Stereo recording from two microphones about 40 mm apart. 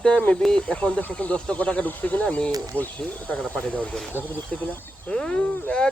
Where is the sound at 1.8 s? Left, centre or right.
Left.